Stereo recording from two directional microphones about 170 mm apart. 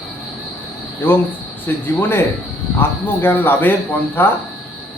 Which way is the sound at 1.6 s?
15° left (ahead or behind).